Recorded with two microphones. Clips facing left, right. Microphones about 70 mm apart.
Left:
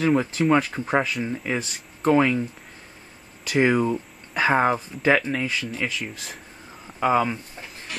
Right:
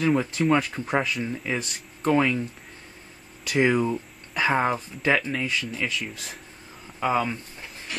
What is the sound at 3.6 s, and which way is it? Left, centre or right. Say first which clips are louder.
Speech: left 2 dB; centre.